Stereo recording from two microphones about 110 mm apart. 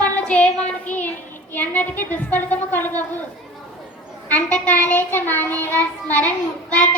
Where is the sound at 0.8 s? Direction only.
15° left (ahead or behind).